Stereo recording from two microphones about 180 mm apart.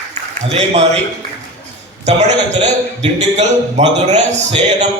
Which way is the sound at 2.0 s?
40° right (ahead or behind).